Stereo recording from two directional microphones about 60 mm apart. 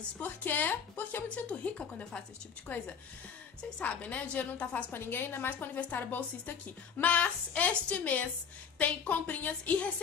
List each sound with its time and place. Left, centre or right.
0.2 s a woman's voice: left
1.3 s a woman's voice: left
4.9 s a woman's voice: left